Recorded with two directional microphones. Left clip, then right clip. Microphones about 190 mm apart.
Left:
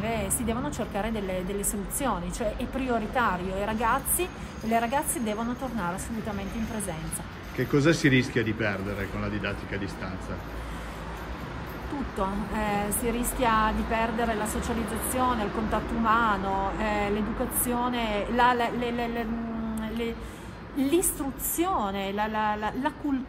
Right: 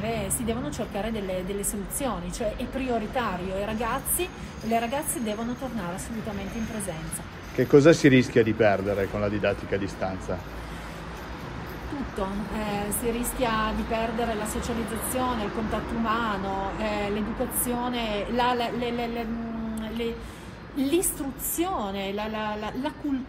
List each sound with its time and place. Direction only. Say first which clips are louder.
0.1 s speech: even; 15° left (ahead or behind)
7.5 s speech: right 7 dB; 10° left (ahead or behind)
12.2 s speech: left 2 dB; 15° left (ahead or behind)
20.7 s speech: even; 15° left (ahead or behind)